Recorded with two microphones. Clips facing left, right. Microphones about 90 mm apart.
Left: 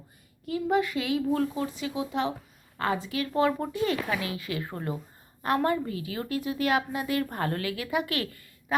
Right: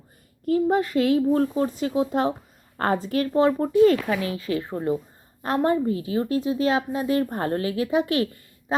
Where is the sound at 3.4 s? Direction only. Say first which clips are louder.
Right 8 dB; 30° right (ahead or behind).